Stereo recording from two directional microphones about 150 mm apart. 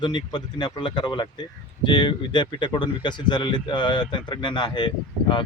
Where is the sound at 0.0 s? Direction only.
30° left (ahead or behind).